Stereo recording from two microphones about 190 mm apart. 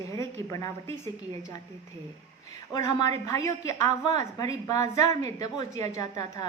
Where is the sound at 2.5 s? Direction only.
20° left (ahead or behind).